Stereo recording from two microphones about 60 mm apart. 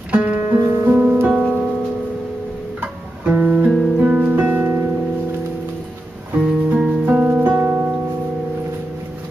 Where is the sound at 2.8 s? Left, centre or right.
Right.